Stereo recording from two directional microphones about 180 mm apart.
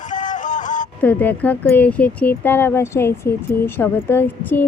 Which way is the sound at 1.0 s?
10° left (ahead or behind).